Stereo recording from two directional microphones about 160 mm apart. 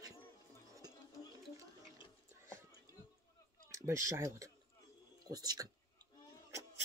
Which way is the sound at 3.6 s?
20° right (ahead or behind).